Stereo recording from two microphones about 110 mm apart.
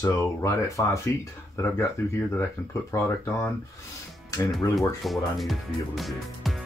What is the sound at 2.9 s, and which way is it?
Speech, 25° left (ahead or behind).